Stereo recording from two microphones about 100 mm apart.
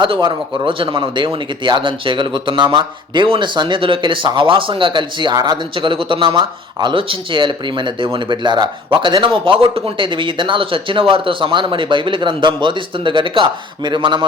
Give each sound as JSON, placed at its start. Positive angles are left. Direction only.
{"t": 0.0, "sound": "speech", "side_deg": -55}